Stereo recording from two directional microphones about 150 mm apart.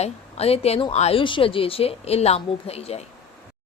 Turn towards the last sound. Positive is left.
turn(degrees=45)  # may be behind; listen again after turning